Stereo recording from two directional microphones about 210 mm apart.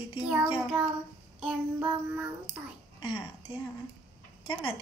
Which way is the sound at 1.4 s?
10° right (ahead or behind).